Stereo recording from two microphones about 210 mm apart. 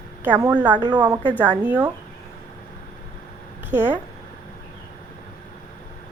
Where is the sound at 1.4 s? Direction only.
5° right (ahead or behind).